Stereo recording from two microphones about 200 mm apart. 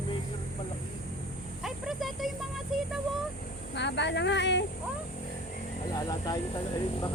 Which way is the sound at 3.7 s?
60° left (ahead or behind).